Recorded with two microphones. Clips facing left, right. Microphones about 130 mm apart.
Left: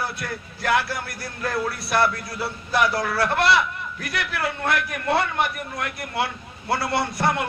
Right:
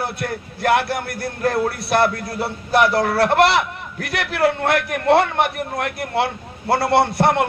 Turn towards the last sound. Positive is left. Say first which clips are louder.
# right 7 dB
turn(degrees=-60)  # may be behind; listen again after turning